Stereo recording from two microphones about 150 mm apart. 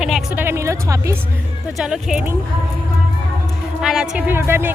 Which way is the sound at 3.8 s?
5° right (ahead or behind).